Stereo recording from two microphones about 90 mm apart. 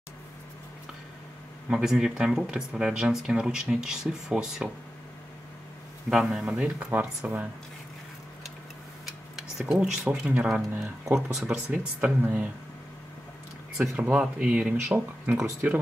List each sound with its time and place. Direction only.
1.7 s speech: 5° right (ahead or behind)
6.0 s speech: 5° right (ahead or behind)
9.0 s speech: 5° right (ahead or behind)
12.2 s speech: 20° right (ahead or behind)
13.7 s speech: 10° right (ahead or behind)